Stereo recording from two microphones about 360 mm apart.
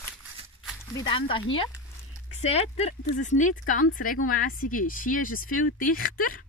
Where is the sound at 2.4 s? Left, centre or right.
Centre.